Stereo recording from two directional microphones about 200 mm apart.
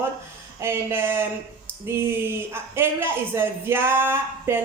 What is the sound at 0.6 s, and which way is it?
Speech, 10° right (ahead or behind).